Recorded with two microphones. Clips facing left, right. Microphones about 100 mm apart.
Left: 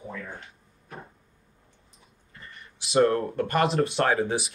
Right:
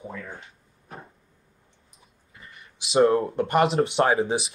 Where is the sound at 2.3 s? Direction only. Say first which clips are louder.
Left 1 dB; 10° right (ahead or behind).